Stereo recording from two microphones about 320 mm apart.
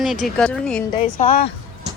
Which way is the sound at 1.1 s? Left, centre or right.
Left.